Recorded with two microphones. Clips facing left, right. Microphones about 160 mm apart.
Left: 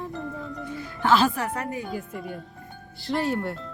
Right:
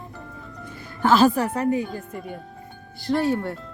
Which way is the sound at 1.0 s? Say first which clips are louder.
Right 4 dB; 40° right (ahead or behind).